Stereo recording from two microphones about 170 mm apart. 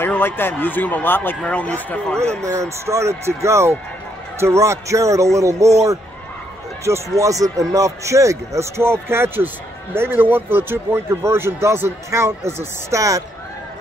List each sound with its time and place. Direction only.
0.0 s a man's voice: 10° left (ahead or behind)
2.4 s speech: 15° right (ahead or behind)
6.8 s speech: 15° right (ahead or behind)